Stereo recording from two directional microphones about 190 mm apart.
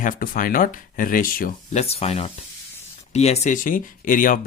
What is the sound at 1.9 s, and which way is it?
Speech, 35° left (ahead or behind).